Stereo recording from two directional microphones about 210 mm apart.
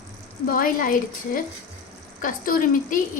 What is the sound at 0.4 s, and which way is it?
A woman's voice, 40° left (ahead or behind).